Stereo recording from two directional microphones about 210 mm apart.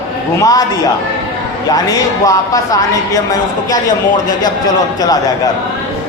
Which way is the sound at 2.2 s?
15° left (ahead or behind).